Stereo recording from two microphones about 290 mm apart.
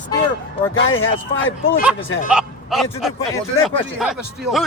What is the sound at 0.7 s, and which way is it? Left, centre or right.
Speech, left.